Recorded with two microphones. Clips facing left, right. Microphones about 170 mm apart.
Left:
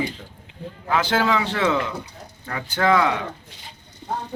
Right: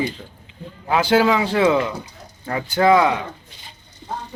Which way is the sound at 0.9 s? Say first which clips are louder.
Right 4 dB; 10° right (ahead or behind).